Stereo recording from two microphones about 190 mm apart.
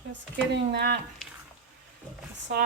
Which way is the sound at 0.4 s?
65° right (ahead or behind).